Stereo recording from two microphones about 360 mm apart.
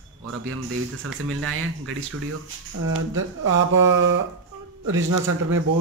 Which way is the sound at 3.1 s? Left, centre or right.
Right.